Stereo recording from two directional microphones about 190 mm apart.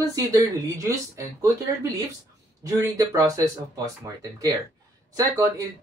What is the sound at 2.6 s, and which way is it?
Speech, 15° right (ahead or behind).